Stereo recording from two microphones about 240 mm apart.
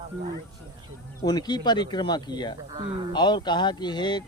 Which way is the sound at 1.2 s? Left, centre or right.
Centre.